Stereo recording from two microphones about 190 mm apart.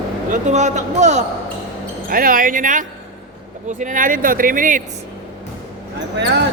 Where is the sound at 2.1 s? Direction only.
50° right (ahead or behind).